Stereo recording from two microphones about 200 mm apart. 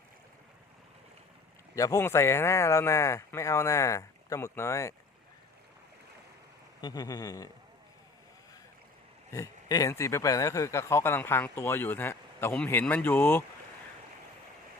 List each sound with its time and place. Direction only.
1.7 s speech: 15° left (ahead or behind)
6.8 s speech: 20° left (ahead or behind)
9.3 s speech: 15° left (ahead or behind)